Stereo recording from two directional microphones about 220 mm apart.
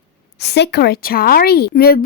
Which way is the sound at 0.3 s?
50° left (ahead or behind).